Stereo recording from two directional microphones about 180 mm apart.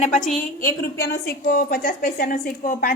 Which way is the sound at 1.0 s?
55° left (ahead or behind).